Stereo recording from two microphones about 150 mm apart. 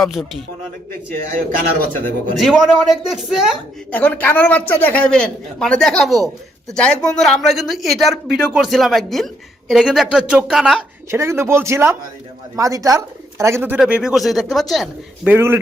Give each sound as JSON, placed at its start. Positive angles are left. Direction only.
{"t": 0.0, "sound": "speech", "side_deg": 0}
{"t": 1.1, "sound": "speech", "side_deg": -65}
{"t": 2.4, "sound": "speech", "side_deg": 0}
{"t": 3.9, "sound": "a woman's voice", "side_deg": 10}
{"t": 11.1, "sound": "speech", "side_deg": -20}
{"t": 13.7, "sound": "speech", "side_deg": -5}
{"t": 15.3, "sound": "speech", "side_deg": -15}